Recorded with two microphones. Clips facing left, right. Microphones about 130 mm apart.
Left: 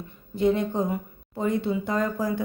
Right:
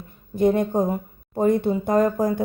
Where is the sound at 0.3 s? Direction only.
50° right (ahead or behind).